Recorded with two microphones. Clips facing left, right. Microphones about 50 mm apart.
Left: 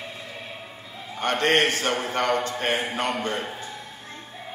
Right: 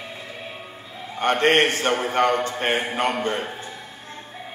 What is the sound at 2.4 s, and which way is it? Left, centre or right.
A man's voice, right.